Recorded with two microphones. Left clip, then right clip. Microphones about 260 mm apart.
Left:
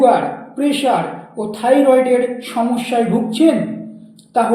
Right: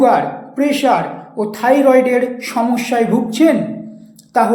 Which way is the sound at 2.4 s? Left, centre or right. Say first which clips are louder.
Right 2 dB; right.